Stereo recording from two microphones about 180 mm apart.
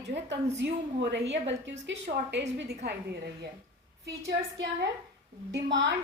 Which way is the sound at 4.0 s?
65° right (ahead or behind).